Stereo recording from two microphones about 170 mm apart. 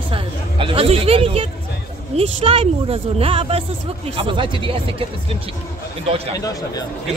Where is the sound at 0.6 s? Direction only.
35° right (ahead or behind).